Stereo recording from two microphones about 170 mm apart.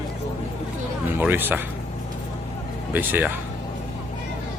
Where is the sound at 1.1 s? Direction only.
10° right (ahead or behind).